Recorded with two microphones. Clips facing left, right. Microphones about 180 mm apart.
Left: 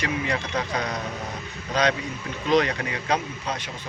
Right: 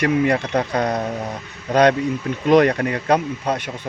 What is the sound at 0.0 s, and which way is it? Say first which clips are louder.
Speech: right 9 dB; 55° right (ahead or behind).